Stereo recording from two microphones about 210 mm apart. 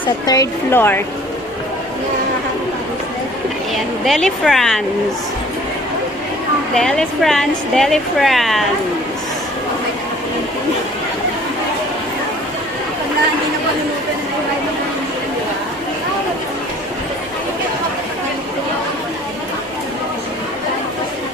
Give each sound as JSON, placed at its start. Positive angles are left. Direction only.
{"t": 0.0, "sound": "a woman's voice", "side_deg": 15}
{"t": 4.0, "sound": "speech", "side_deg": 0}
{"t": 6.7, "sound": "speech", "side_deg": 0}